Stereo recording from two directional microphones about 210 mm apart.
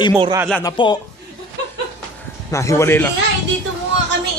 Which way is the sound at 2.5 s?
15° left (ahead or behind).